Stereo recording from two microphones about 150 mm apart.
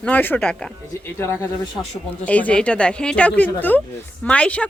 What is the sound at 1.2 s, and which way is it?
Speech, 15° left (ahead or behind).